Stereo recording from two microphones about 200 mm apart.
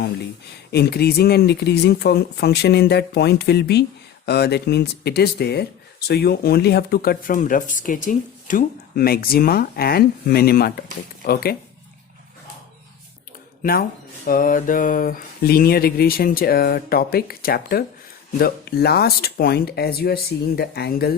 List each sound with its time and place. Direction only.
0.7 s speech: 55° left (ahead or behind)
13.6 s speech: 45° left (ahead or behind)